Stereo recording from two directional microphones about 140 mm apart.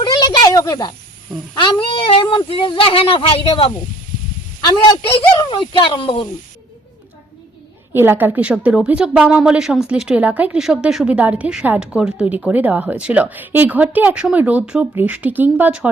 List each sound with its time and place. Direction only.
0.0 s a sound: 30° left (ahead or behind)
1.6 s speech: 35° left (ahead or behind)
5.4 s speech: 35° left (ahead or behind)
7.9 s a woman's voice: 15° right (ahead or behind)